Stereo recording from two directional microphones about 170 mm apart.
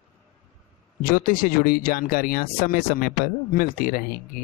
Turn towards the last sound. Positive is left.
turn(degrees=55)  # may be behind; listen again after turning